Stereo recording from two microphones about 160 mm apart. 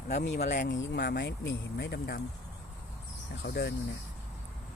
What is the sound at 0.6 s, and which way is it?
Speech, 90° left.